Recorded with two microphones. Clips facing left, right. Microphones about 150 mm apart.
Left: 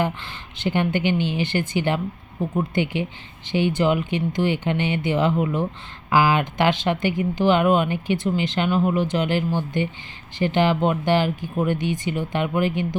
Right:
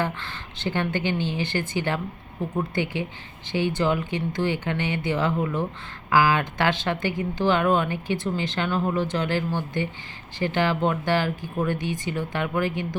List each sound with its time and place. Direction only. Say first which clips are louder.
0.0 s a woman's voice: left 3 dB; 15° left (ahead or behind)